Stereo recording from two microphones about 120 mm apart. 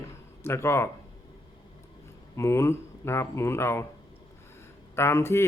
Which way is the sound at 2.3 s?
25° left (ahead or behind).